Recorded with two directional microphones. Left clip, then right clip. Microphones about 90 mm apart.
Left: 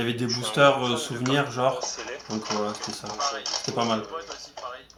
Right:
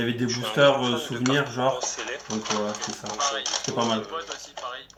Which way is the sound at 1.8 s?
15° right (ahead or behind).